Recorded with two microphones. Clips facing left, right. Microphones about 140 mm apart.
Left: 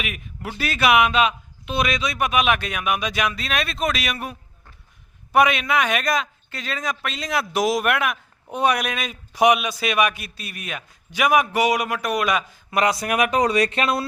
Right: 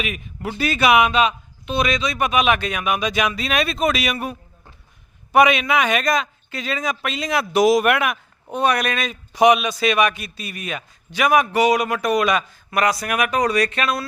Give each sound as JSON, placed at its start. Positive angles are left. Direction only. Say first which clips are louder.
{"t": 0.0, "sound": "a man's voice", "louder": "right 4 dB", "side_deg": 5}
{"t": 8.5, "sound": "a man's voice", "louder": "right 2 dB", "side_deg": 10}
{"t": 12.7, "sound": "speech", "louder": "even", "side_deg": 25}